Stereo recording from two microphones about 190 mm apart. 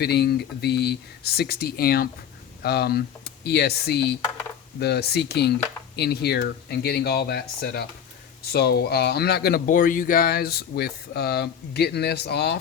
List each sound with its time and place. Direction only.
0.0 s speech: 60° left (ahead or behind)